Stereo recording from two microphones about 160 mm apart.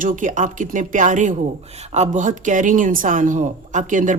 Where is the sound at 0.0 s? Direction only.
55° right (ahead or behind).